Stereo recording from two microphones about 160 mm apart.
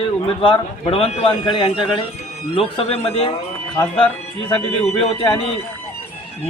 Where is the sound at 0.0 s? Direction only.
30° left (ahead or behind).